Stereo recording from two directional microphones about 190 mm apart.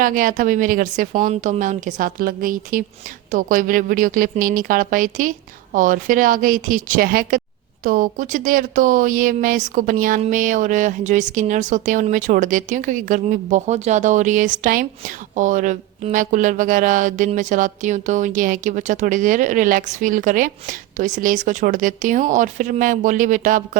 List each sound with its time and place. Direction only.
0.0 s speech: 45° right (ahead or behind)